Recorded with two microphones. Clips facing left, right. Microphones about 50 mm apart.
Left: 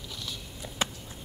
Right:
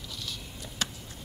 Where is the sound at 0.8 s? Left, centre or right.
Left.